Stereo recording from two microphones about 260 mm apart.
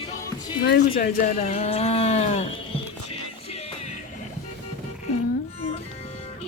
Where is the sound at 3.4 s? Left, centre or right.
Left.